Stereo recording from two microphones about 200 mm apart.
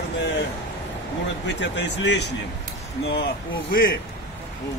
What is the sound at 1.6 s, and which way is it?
Speech, 60° left (ahead or behind).